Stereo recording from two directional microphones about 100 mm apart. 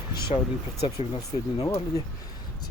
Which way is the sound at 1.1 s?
40° left (ahead or behind).